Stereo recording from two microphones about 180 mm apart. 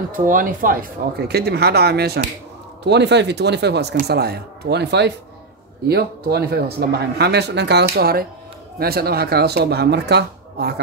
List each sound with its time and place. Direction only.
0.3 s a man's voice: 50° right (ahead or behind); by 10.7 s 65° right (ahead or behind)